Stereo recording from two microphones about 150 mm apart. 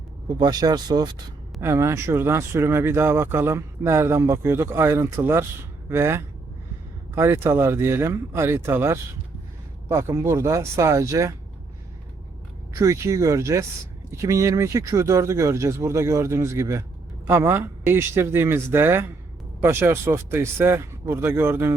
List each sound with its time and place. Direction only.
0.3 s speech: 30° right (ahead or behind)
1.6 s speech: 15° right (ahead or behind)
12.8 s speech: 20° right (ahead or behind)